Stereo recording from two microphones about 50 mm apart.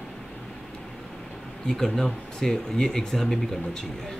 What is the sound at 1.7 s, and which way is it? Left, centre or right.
Speech, centre.